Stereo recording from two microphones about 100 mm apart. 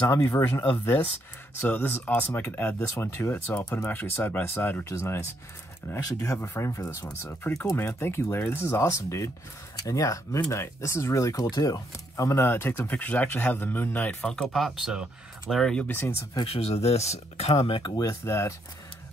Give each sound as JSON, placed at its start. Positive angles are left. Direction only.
{"t": 0.1, "sound": "speech", "side_deg": 30}
{"t": 0.7, "sound": "speech", "side_deg": 20}
{"t": 12.4, "sound": "speech", "side_deg": 20}
{"t": 14.3, "sound": "speech", "side_deg": 0}
{"t": 15.6, "sound": "speech", "side_deg": 10}
{"t": 16.5, "sound": "speech", "side_deg": 90}
{"t": 17.9, "sound": "speech", "side_deg": 30}